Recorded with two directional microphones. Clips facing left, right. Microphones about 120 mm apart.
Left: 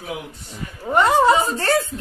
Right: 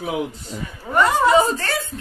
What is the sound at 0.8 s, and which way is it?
Speech, 25° left (ahead or behind).